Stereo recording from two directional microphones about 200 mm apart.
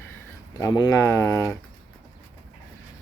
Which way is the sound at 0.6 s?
20° left (ahead or behind).